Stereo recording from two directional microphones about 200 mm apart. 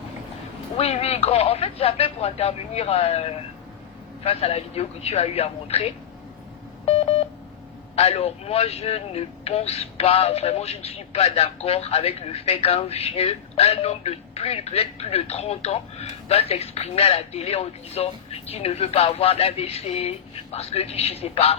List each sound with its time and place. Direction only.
0.8 s speech: 30° left (ahead or behind)
6.8 s telephone dialing: 30° left (ahead or behind)
7.9 s speech: 30° left (ahead or behind)